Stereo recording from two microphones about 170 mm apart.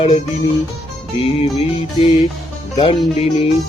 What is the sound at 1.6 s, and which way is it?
Music, 35° left (ahead or behind).